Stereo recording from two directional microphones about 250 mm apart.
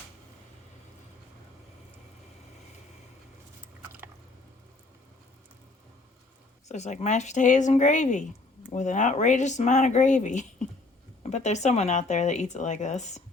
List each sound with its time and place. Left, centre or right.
3.6 s squish: centre
6.7 s speech: left